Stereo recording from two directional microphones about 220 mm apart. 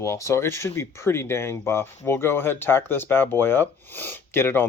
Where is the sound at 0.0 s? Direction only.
15° left (ahead or behind).